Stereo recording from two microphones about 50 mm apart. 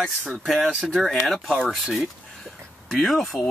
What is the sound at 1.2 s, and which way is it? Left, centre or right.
Speech, centre.